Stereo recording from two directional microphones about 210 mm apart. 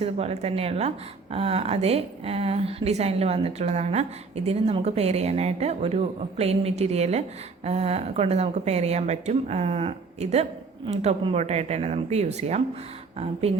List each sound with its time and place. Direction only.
0.0 s a woman's voice: 30° right (ahead or behind)